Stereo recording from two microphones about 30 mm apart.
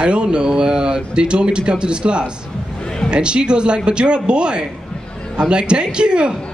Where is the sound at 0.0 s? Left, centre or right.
Right.